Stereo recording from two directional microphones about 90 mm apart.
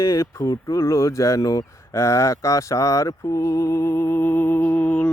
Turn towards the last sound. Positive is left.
turn(degrees=15)  # may be behind; listen again after turning